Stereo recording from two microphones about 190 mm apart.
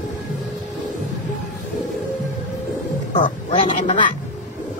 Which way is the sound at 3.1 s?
30° left (ahead or behind).